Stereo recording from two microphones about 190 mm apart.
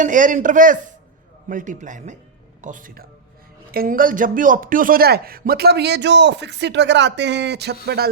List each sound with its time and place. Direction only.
0.0 s a man's voice: 45° right (ahead or behind)